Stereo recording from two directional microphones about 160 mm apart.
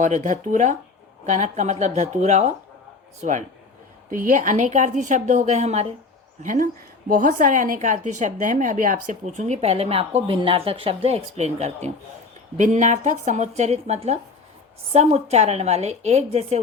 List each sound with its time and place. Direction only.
0.0 s a woman's voice: 50° right (ahead or behind)
6.4 s a woman's voice: 55° right (ahead or behind)